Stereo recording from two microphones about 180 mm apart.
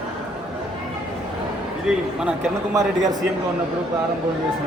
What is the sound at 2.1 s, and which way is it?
Speech, 5° right (ahead or behind).